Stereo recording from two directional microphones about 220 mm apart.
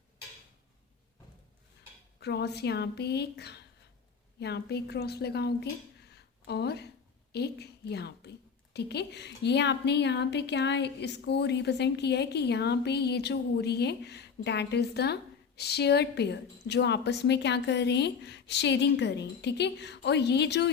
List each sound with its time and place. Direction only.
2.2 s a woman's voice: 50° left (ahead or behind)
6.1 s a sound: 50° left (ahead or behind)
7.3 s a woman's voice: 50° left (ahead or behind)